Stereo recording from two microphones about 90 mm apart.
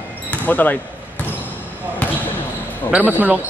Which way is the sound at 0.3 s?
15° left (ahead or behind).